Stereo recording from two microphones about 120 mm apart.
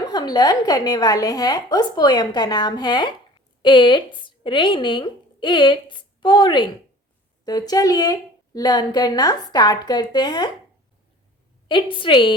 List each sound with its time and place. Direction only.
0.1 s speech: 35° left (ahead or behind)
11.7 s a woman's voice: 45° left (ahead or behind)